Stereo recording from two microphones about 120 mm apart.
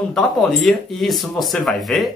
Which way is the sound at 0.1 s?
5° left (ahead or behind).